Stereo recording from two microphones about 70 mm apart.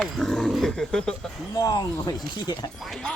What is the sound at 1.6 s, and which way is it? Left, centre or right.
Speech, left.